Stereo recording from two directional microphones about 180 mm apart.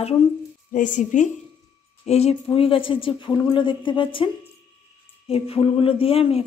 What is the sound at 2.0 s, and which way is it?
Speech, 35° left (ahead or behind).